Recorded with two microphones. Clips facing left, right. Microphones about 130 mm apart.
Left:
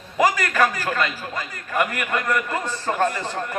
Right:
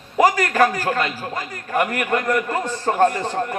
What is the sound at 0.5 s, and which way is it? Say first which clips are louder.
A man's voice: right 3 dB; 40° right (ahead or behind).